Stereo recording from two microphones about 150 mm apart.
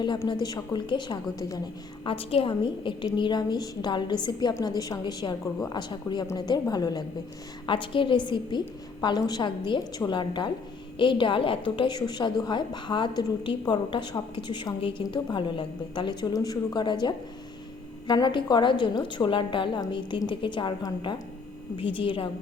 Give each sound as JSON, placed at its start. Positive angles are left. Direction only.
{"t": 0.3, "sound": "a woman's voice", "side_deg": 30}
{"t": 2.0, "sound": "a woman's voice", "side_deg": 35}